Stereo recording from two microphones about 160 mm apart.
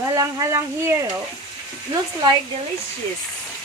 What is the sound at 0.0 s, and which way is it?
Speech, 20° right (ahead or behind).